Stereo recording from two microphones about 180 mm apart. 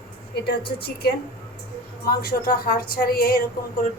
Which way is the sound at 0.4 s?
65° left (ahead or behind).